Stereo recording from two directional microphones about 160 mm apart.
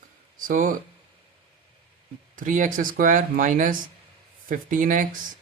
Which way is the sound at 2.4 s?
55° right (ahead or behind).